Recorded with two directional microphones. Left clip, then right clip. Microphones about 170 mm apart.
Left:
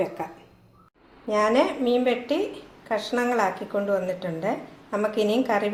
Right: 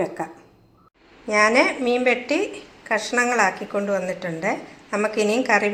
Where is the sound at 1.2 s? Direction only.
Centre (ahead or behind).